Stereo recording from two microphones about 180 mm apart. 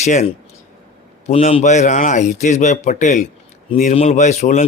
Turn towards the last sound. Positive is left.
turn(degrees=40)  # may be behind; listen again after turning